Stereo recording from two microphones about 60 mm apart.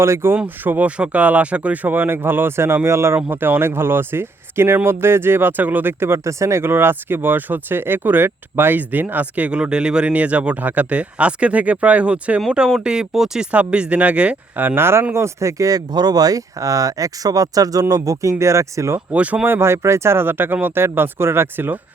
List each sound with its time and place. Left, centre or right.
0.0 s speech: right
0.4 s speech: right
0.9 s speech: centre; by 3.2 s right
3.2 s speech: right
6.0 s speech: right; by 13.5 s centre
13.5 s speech: right
14.8 s speech: right
19.1 s speech: right
19.5 s speech: right